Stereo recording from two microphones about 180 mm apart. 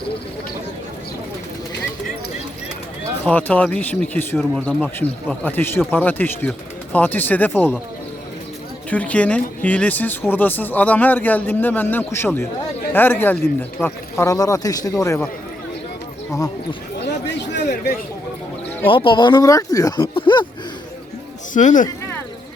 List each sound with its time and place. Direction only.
3.2 s speech: 10° left (ahead or behind)
8.9 s speech: 10° left (ahead or behind)
17.2 s a sound: 65° left (ahead or behind)
18.9 s speech: 30° left (ahead or behind)
21.5 s speech: 45° left (ahead or behind)